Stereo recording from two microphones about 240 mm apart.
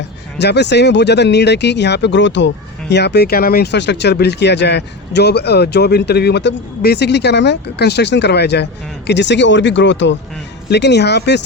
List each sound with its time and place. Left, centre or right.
0.3 s speech: left